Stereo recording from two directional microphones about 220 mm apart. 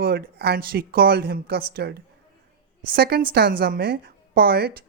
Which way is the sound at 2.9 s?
45° right (ahead or behind).